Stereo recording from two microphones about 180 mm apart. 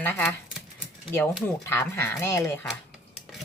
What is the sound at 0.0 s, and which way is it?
Speech, 10° left (ahead or behind).